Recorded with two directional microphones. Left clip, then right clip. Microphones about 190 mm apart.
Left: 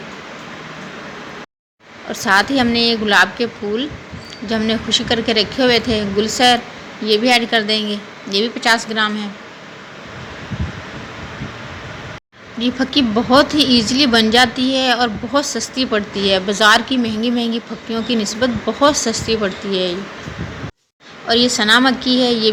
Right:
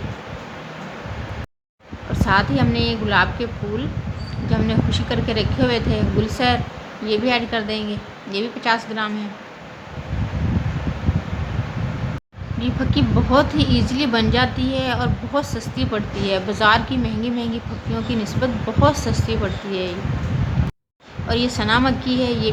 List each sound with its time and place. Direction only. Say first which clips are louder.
2.1 s a woman's voice: left 4 dB; 20° left (ahead or behind)
12.5 s a woman's voice: left 6 dB; 20° left (ahead or behind)
21.2 s a woman's voice: left 7 dB; 10° left (ahead or behind)